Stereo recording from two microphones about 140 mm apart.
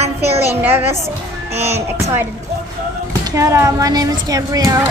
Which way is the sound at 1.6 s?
50° right (ahead or behind).